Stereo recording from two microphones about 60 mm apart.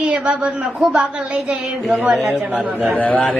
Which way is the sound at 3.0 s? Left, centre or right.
Left.